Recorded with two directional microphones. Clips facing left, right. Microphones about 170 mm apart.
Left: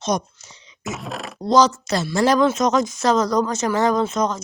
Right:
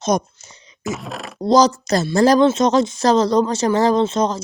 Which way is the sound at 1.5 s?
40° right (ahead or behind).